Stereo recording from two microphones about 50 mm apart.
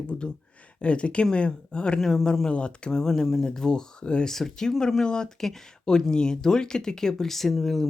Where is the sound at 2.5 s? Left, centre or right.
Left.